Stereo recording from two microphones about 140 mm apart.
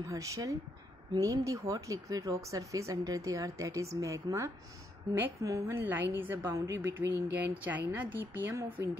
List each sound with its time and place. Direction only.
0.1 s a woman's voice: 25° right (ahead or behind)